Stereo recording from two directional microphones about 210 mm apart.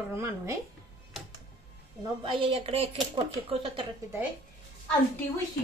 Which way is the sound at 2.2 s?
25° right (ahead or behind).